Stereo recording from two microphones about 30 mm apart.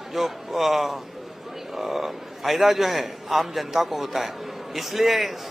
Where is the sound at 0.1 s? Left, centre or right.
Centre.